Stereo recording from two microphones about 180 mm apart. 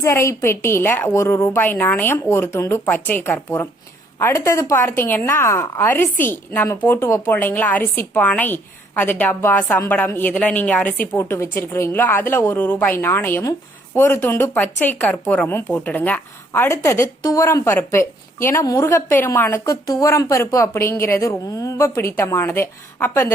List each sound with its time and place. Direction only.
0.0 s speech: 15° left (ahead or behind)
6.1 s a woman's voice: 45° left (ahead or behind)
6.3 s speech: 10° left (ahead or behind)